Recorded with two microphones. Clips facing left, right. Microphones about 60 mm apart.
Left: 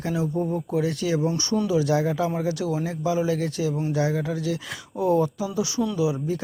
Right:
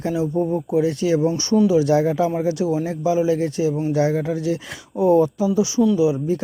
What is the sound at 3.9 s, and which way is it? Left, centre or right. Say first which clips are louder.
Speech: right 5 dB; right.